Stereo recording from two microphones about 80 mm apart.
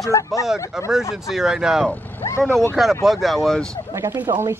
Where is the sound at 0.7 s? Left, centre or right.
Centre.